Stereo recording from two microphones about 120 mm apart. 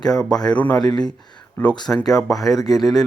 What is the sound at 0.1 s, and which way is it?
Speech, 5° left (ahead or behind).